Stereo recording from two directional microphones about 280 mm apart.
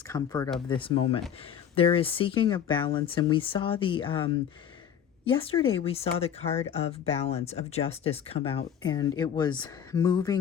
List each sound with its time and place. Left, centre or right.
0.1 s speech: centre
5.2 s speech: centre